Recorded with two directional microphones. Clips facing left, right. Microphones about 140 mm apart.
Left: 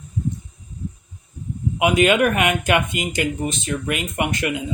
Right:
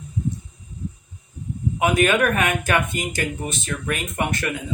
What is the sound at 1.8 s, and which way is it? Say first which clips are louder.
Speech: left 2 dB; 20° left (ahead or behind).